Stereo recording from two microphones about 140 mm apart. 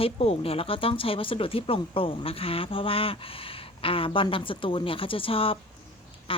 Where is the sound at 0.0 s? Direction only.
45° left (ahead or behind).